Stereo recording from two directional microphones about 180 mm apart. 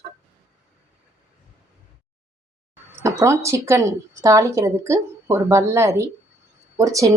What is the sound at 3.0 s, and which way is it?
A woman's voice, 15° right (ahead or behind).